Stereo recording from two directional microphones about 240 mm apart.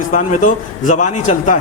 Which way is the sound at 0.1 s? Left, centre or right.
Left.